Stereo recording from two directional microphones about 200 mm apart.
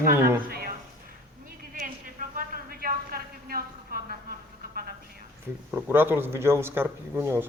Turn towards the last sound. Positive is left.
turn(degrees=-10)  # may be behind; listen again after turning